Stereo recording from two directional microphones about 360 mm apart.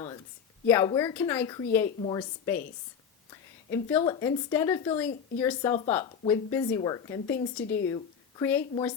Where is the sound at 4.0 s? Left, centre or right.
Centre.